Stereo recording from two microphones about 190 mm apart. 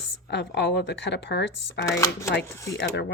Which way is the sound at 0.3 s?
65° left (ahead or behind).